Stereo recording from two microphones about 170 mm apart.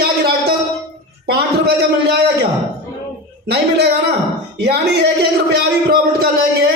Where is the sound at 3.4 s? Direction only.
80° right.